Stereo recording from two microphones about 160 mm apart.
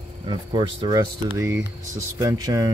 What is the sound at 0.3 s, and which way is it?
Speech, 30° right (ahead or behind).